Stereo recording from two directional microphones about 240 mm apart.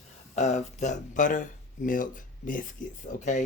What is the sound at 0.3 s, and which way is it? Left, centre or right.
Speech, left.